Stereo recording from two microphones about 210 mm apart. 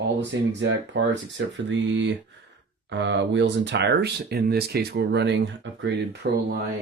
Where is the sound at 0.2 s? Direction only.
55° right (ahead or behind).